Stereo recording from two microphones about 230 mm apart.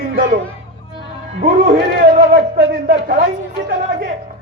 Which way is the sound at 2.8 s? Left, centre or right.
Right.